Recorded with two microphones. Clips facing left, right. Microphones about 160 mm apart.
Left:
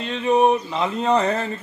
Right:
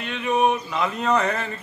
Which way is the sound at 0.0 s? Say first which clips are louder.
Left 4 dB; 30° left (ahead or behind).